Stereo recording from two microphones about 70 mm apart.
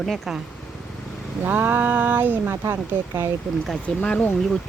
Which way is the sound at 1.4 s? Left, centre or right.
Right.